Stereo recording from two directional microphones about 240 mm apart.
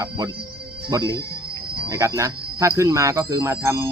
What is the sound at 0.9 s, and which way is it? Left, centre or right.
Speech, centre.